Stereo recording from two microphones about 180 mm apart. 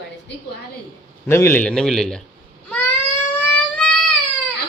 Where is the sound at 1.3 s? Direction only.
15° left (ahead or behind).